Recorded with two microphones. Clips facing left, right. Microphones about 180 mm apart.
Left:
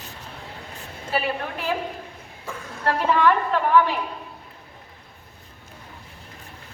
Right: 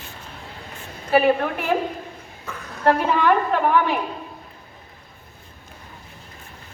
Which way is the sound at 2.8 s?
50° right (ahead or behind).